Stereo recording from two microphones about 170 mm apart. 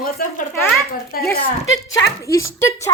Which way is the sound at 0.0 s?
55° left (ahead or behind).